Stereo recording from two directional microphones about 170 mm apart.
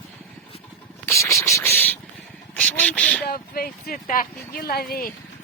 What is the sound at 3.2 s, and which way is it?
Speech, 60° left (ahead or behind).